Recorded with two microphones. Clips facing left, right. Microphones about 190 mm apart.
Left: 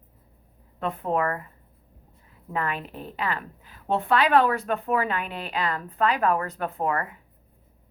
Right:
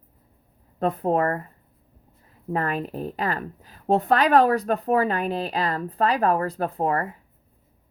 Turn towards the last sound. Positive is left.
turn(degrees=-35)  # may be behind; listen again after turning